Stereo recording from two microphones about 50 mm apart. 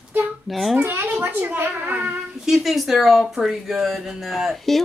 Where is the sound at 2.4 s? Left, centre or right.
Centre.